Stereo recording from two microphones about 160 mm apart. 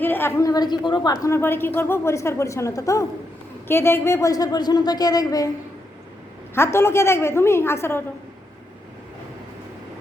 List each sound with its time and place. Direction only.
0.0 s a woman's voice: 15° left (ahead or behind)
6.5 s a woman's voice: 15° left (ahead or behind)